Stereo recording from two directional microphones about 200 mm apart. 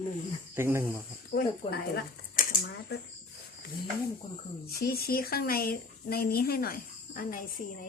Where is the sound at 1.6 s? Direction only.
25° left (ahead or behind).